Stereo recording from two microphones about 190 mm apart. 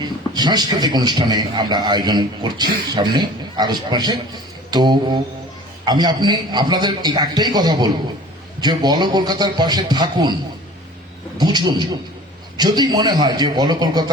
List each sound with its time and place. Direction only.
0.0 s a man's voice: 20° right (ahead or behind)
4.7 s mantra: 20° right (ahead or behind)
5.8 s a man's voice: 20° right (ahead or behind)
11.3 s a man's voice: 20° right (ahead or behind)